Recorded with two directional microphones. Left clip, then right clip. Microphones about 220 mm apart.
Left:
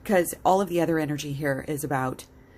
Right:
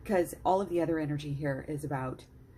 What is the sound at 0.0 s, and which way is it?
A woman's voice, 20° left (ahead or behind).